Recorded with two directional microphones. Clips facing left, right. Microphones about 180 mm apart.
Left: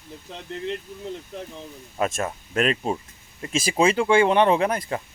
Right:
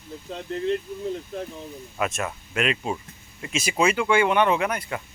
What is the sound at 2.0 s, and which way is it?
Speech, 35° left (ahead or behind).